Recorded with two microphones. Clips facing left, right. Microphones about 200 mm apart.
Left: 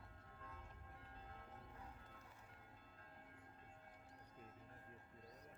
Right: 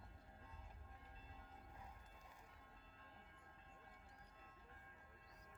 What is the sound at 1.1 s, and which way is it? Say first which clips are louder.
Music: left 7 dB; 65° left (ahead or behind).